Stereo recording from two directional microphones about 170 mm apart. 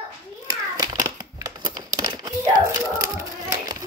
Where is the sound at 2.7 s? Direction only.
15° right (ahead or behind).